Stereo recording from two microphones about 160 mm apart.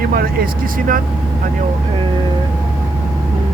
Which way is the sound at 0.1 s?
70° right (ahead or behind).